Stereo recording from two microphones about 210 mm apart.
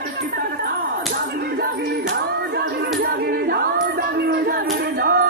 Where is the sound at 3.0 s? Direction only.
45° right (ahead or behind).